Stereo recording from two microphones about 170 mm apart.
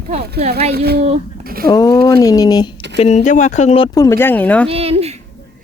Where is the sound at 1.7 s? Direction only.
20° left (ahead or behind).